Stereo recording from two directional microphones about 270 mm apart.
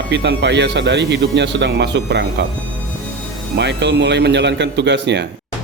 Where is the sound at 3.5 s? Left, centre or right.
Right.